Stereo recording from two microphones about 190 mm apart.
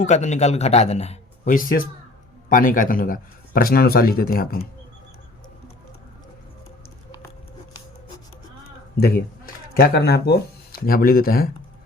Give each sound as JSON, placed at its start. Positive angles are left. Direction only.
{"t": 0.0, "sound": "a man's voice", "side_deg": 40}
{"t": 8.6, "sound": "a sound", "side_deg": 55}
{"t": 9.7, "sound": "a man's voice", "side_deg": 55}